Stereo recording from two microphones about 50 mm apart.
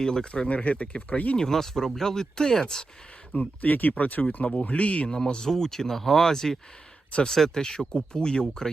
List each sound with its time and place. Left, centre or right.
0.0 s speech: centre
1.4 s speech: centre
3.3 s speech: left
5.0 s speech: centre